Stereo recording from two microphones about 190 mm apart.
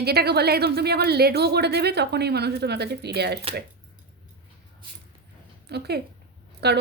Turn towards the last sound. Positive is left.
turn(degrees=-60)  # may be behind; listen again after turning